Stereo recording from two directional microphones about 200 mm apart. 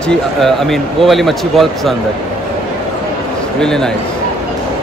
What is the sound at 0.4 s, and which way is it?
Speech, centre (ahead or behind).